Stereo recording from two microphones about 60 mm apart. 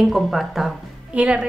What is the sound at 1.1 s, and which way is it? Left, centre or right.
Speech, centre.